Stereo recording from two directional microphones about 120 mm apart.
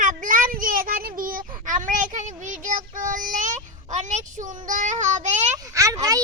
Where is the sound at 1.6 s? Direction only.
90° right.